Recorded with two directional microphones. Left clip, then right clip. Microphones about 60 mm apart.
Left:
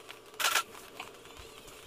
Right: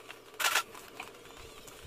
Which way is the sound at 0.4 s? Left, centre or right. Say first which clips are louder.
Even; left.